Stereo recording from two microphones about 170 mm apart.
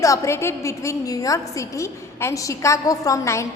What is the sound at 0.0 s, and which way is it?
A woman's voice, 20° left (ahead or behind).